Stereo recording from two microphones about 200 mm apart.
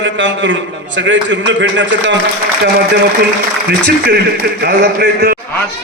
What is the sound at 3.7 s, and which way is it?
A man's voice, 50° right (ahead or behind).